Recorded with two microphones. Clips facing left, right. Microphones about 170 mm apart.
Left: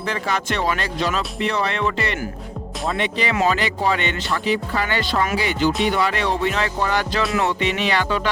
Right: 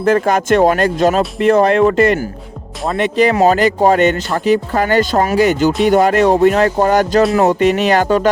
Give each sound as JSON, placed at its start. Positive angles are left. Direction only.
{"t": 0.0, "sound": "speech", "side_deg": -50}